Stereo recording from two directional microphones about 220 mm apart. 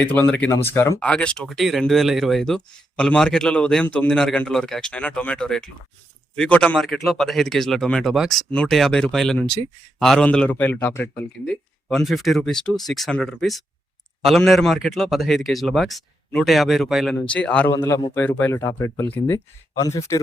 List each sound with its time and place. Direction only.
0.1 s speech: 5° left (ahead or behind)